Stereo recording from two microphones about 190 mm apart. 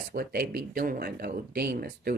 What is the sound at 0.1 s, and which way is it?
Speech, 55° right (ahead or behind).